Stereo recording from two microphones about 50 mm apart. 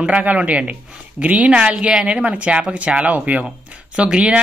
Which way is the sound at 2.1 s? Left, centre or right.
Right.